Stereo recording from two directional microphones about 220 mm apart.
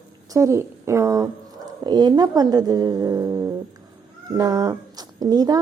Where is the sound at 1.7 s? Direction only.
20° right (ahead or behind).